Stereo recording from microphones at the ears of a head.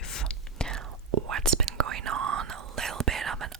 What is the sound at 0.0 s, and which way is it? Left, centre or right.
Whispering, left.